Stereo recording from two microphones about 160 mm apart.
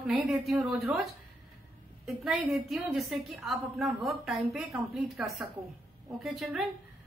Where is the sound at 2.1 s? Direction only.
Centre (ahead or behind).